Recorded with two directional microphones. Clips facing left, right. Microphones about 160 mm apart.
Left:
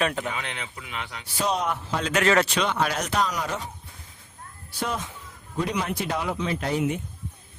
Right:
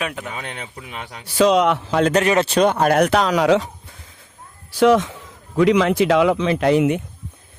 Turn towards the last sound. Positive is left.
turn(degrees=-80)